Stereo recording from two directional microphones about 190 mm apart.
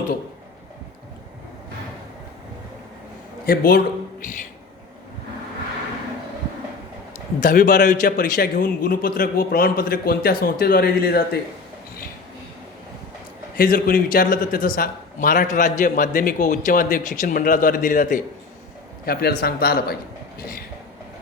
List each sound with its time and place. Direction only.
3.4 s speech: 50° left (ahead or behind)
7.3 s a man's voice: 45° left (ahead or behind)
13.6 s a man's voice: 50° left (ahead or behind)